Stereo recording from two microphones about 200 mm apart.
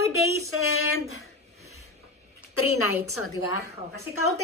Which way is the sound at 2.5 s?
90° left.